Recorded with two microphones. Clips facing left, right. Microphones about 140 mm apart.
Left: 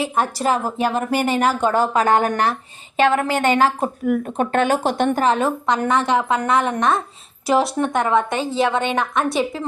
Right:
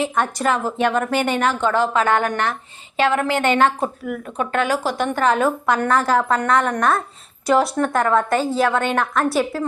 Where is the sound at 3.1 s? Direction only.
15° left (ahead or behind).